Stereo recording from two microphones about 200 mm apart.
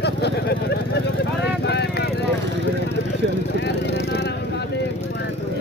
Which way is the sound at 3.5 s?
60° left (ahead or behind).